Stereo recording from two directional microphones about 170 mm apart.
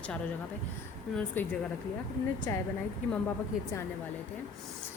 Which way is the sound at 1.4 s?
10° left (ahead or behind).